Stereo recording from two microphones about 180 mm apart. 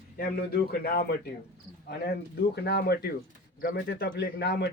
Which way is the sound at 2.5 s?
65° left (ahead or behind).